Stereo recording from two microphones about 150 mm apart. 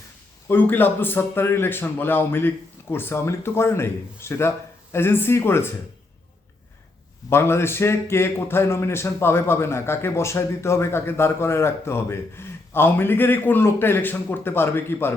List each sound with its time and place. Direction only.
0.4 s a man's voice: 15° left (ahead or behind)
7.3 s a man's voice: 15° left (ahead or behind)